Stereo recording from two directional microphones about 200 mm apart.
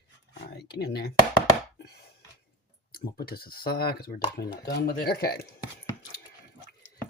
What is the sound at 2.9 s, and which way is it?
Speech, 50° left (ahead or behind).